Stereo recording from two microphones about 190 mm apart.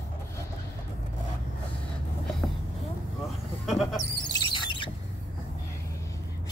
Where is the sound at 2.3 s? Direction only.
Centre (ahead or behind).